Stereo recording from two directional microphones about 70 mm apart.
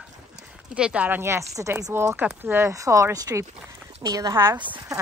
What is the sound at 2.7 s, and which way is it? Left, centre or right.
Speech, right.